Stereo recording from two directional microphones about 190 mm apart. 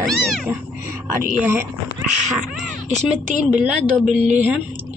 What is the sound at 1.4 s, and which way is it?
Speech, 10° right (ahead or behind).